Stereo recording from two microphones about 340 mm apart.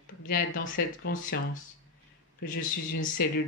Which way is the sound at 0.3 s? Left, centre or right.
Left.